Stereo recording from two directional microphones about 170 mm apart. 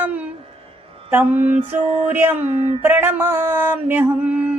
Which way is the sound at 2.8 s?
15° right (ahead or behind).